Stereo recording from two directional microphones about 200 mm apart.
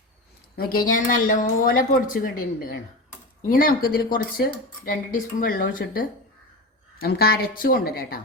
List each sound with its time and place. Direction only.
0.5 s speech: 45° left (ahead or behind)